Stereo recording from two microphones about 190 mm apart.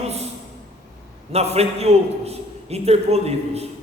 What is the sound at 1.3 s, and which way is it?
A man's voice, 35° right (ahead or behind).